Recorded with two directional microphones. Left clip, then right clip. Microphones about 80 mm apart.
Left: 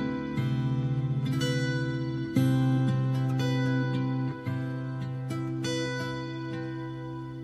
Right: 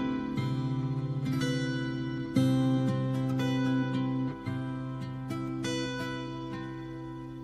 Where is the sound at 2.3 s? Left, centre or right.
Right.